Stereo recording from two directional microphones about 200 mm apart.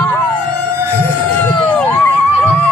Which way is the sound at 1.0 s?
10° left (ahead or behind).